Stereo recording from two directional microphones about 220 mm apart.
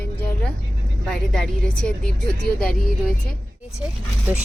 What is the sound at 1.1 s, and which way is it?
Speech, centre (ahead or behind).